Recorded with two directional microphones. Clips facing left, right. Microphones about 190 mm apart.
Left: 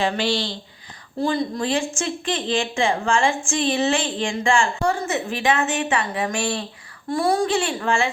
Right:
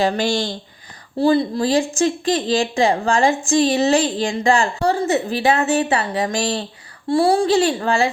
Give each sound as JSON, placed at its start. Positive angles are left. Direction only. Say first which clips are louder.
{"t": 0.0, "sound": "speech", "louder": "right 4 dB", "side_deg": -40}
{"t": 1.2, "sound": "speech", "louder": "right 6 dB", "side_deg": -35}